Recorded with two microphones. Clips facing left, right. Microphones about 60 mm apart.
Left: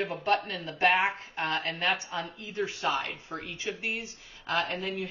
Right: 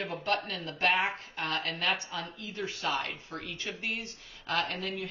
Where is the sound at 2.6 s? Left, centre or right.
Centre.